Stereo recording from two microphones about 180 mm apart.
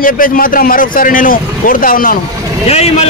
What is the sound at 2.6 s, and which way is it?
Speech, 35° left (ahead or behind).